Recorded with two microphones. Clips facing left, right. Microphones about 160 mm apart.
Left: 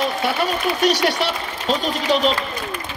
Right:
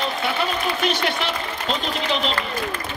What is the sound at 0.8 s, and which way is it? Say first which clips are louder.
Speech: left 8 dB; 40° left (ahead or behind).